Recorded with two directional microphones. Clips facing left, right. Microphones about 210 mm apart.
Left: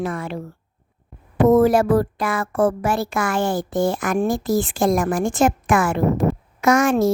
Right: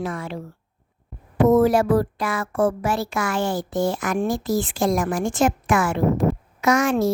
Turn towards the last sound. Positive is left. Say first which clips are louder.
# left 3 dB
turn(degrees=50)  # may be behind; listen again after turning